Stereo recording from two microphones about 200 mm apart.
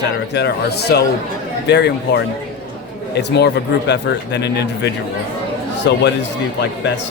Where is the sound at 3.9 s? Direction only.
55° left (ahead or behind).